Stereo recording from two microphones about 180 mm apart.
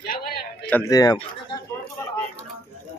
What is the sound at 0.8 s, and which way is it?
Speech, 20° left (ahead or behind).